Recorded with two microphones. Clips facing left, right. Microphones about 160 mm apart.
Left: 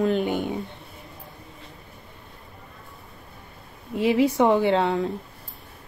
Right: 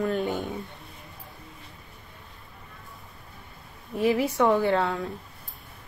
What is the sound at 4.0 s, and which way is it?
A woman's voice, 20° left (ahead or behind).